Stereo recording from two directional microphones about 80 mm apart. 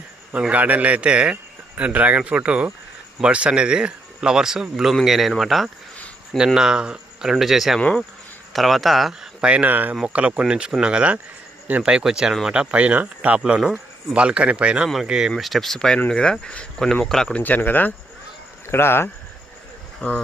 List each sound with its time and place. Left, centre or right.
0.3 s speech: centre
9.4 s speech: centre
12.5 s speech: centre
15.4 s speech: centre
17.3 s speech: left
20.0 s speech: centre